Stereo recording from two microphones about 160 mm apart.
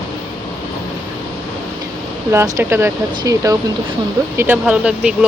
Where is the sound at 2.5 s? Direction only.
15° right (ahead or behind).